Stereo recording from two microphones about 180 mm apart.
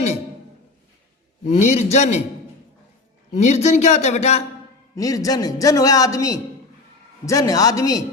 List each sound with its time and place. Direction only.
1.5 s speech: 40° left (ahead or behind)
3.3 s speech: 40° left (ahead or behind)
4.9 s a man's voice: 20° left (ahead or behind)